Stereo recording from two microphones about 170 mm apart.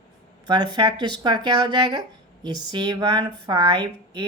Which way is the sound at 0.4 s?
25° right (ahead or behind).